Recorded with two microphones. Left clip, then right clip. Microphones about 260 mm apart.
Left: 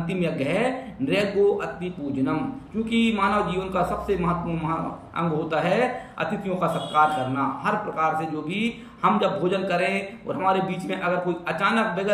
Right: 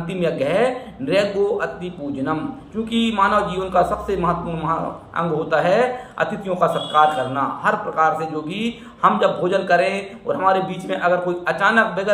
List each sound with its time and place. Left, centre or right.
0.2 s a man's voice: centre
2.9 s a man's voice: centre